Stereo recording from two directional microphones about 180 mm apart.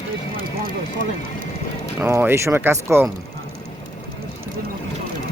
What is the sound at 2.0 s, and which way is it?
Speech, 10° right (ahead or behind).